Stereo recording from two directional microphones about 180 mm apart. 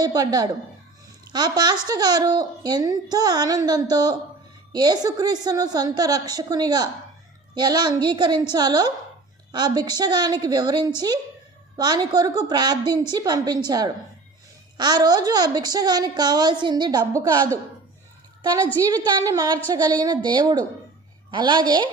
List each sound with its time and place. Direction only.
0.0 s speech: 20° right (ahead or behind)
18.9 s speech: 20° right (ahead or behind)